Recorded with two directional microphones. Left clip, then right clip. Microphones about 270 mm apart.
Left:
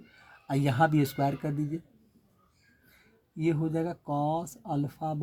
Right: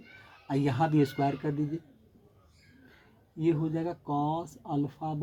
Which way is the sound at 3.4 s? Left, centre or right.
Left.